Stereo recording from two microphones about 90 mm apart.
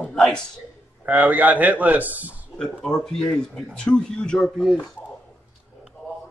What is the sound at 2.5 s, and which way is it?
Speech, 10° left (ahead or behind).